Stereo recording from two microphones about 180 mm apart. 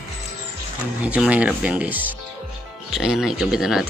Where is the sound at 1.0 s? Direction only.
5° right (ahead or behind).